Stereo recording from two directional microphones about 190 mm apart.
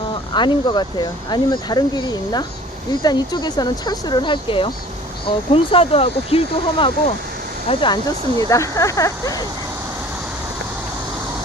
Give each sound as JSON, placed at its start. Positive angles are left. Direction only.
{"t": 0.3, "sound": "speech", "side_deg": 25}
{"t": 8.4, "sound": "speech", "side_deg": 15}